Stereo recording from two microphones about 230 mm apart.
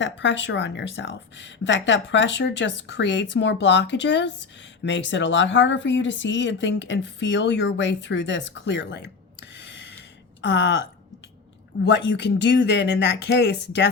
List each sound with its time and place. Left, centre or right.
0.0 s speech: left
9.6 s gasp: left
10.4 s speech: left
11.8 s speech: left